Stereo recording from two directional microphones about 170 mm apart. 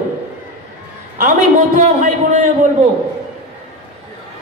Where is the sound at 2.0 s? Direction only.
45° right (ahead or behind).